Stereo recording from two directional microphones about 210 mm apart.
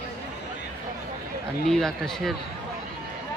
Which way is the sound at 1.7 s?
Centre (ahead or behind).